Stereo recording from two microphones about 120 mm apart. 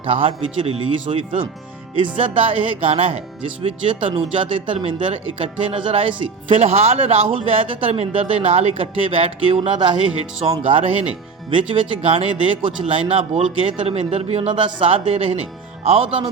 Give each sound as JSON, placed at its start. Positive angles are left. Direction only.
{"t": 0.0, "sound": "speech", "side_deg": -50}